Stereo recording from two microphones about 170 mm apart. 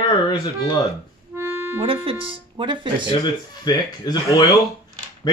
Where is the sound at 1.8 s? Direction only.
30° right (ahead or behind).